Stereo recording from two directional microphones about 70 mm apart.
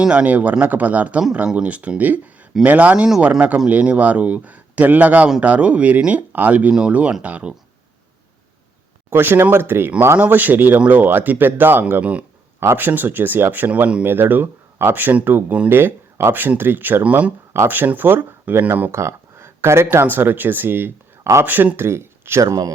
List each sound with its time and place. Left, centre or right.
0.0 s speech: centre
9.0 s speech: right
14.0 s speech: right
18.9 s speech: right
21.8 s speech: right
22.4 s speech: right